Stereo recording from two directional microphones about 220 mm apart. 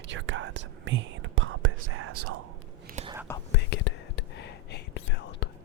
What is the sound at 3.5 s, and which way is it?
Whispering, 50° left (ahead or behind).